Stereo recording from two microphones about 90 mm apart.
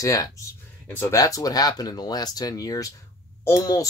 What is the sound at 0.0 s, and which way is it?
Speech, 40° left (ahead or behind).